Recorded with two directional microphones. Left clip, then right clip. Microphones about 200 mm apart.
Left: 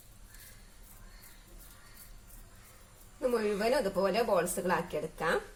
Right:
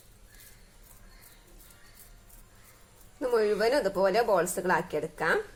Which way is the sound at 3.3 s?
35° right (ahead or behind).